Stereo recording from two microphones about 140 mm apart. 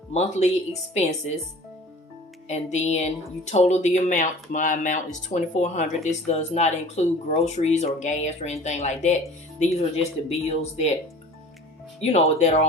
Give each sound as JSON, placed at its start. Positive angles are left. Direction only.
{"t": 0.1, "sound": "speech", "side_deg": 50}
{"t": 2.5, "sound": "a woman's voice", "side_deg": 55}
{"t": 11.9, "sound": "speech", "side_deg": 50}